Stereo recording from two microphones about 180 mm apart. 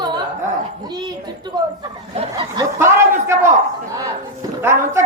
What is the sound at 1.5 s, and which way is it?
Speech, 20° right (ahead or behind).